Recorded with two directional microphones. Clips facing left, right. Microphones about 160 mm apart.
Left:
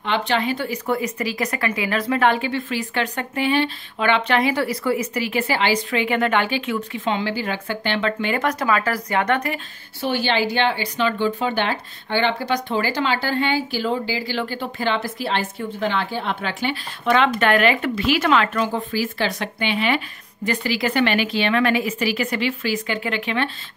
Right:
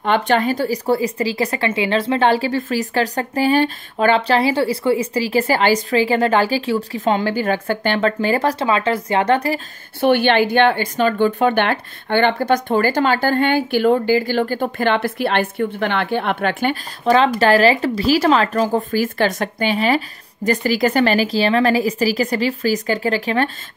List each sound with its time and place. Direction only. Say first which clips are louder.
0.0 s speech: right 5 dB; 50° right (ahead or behind); by 9.6 s 30° right (ahead or behind)
9.9 s a woman's voice: right 7 dB; 60° right (ahead or behind)
17.0 s speech: right 4 dB; 35° right (ahead or behind)